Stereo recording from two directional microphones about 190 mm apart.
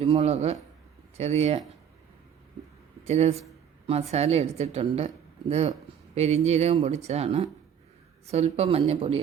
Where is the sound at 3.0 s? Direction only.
35° right (ahead or behind).